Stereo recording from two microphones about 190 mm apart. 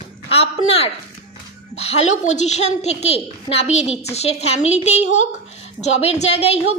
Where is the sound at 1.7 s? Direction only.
35° left (ahead or behind).